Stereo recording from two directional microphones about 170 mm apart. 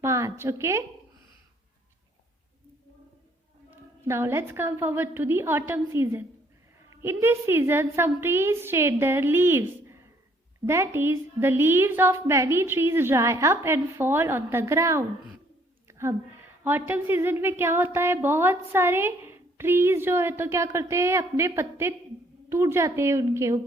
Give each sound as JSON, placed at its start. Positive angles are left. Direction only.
{"t": 0.0, "sound": "a woman's voice", "side_deg": -15}
{"t": 3.7, "sound": "speech", "side_deg": -15}
{"t": 15.9, "sound": "a sound", "side_deg": -15}
{"t": 16.6, "sound": "speech", "side_deg": -10}